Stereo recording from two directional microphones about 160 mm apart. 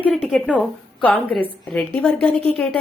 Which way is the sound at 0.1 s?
Centre (ahead or behind).